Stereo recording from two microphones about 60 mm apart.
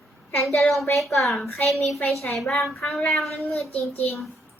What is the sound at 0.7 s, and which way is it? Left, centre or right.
A child's voice, centre.